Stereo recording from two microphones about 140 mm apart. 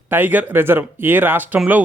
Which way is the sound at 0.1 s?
10° right (ahead or behind).